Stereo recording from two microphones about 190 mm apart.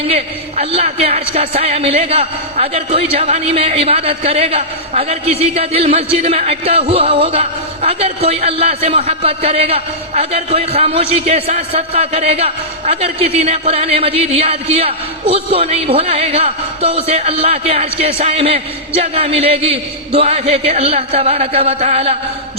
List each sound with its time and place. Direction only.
0.1 s a man's voice: 35° right (ahead or behind)